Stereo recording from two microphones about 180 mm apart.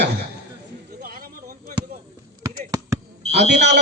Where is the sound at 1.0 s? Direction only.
55° right (ahead or behind).